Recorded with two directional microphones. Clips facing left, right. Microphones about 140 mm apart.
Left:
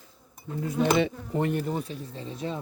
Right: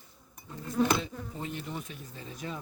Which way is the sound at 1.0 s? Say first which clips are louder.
Left 12 dB; 75° left (ahead or behind).